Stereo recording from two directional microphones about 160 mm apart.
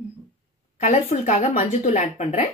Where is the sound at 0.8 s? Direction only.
40° left (ahead or behind).